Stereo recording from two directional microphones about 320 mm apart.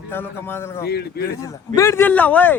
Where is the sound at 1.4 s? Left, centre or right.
Centre.